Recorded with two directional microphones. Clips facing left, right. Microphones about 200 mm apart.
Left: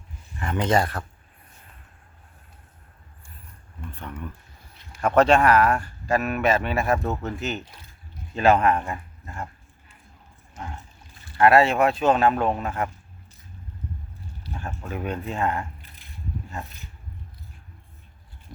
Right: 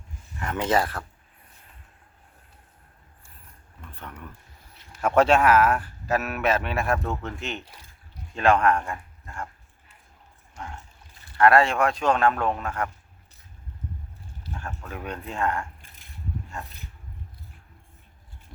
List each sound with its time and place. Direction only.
0.5 s speech: 5° right (ahead or behind)
4.9 s speech: 10° right (ahead or behind)
8.9 s speech: 20° left (ahead or behind)
11.3 s speech: 5° left (ahead or behind)
12.6 s speech: 20° left (ahead or behind)
14.6 s speech: 20° left (ahead or behind)
14.9 s speech: 5° left (ahead or behind)